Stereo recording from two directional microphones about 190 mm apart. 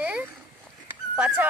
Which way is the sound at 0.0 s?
5° right (ahead or behind).